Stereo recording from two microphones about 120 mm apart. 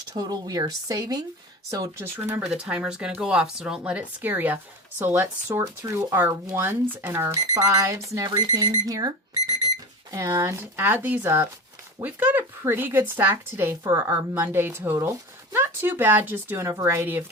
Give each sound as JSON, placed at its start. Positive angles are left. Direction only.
{"t": 0.1, "sound": "speech", "side_deg": -30}
{"t": 2.4, "sound": "speech", "side_deg": -10}